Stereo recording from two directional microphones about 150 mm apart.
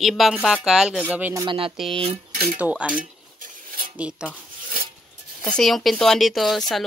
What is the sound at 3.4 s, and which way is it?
Cutlery, 65° right (ahead or behind).